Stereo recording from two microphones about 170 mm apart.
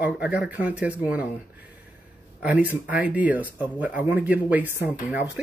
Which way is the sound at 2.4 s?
10° right (ahead or behind).